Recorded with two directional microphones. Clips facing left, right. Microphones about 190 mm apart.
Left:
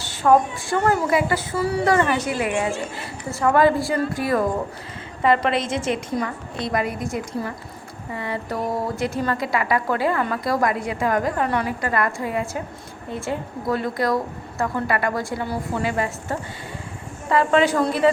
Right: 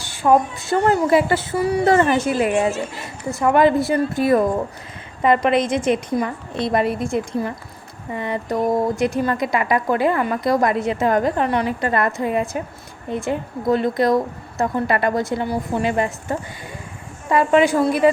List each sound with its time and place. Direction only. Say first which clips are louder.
0.2 s a woman's voice: right 1 dB; 20° right (ahead or behind)
17.2 s a woman's voice: right 2 dB; 15° right (ahead or behind)